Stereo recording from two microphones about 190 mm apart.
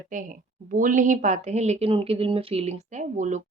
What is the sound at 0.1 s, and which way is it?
A woman's voice, 45° right (ahead or behind).